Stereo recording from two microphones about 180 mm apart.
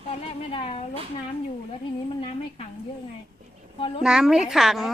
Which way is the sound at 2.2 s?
30° left (ahead or behind).